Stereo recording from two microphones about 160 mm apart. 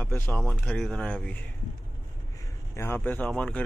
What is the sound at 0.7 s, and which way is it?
Speech, 5° left (ahead or behind).